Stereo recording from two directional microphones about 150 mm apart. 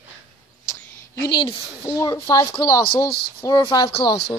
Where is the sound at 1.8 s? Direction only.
25° left (ahead or behind).